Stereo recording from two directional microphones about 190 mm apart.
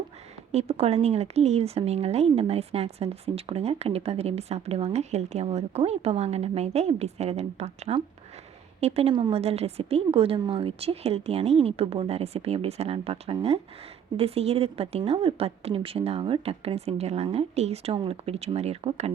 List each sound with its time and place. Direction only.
0.5 s speech: 35° right (ahead or behind)